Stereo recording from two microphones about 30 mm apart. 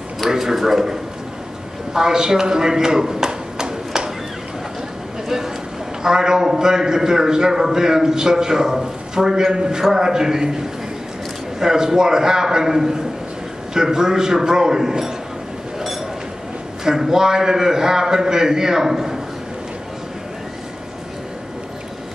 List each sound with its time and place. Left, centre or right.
0.3 s a man's voice: centre
2.0 s a sound: right
6.0 s a man's voice: centre
11.6 s a man's voice: right
16.8 s a man's voice: centre